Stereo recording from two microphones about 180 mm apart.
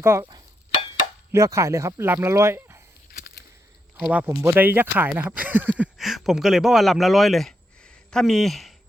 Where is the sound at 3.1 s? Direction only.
55° left (ahead or behind).